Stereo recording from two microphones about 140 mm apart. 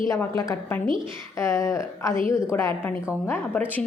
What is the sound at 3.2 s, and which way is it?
Speech, 15° left (ahead or behind).